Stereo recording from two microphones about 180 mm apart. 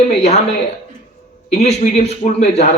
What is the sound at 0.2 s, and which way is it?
Speech, 35° left (ahead or behind).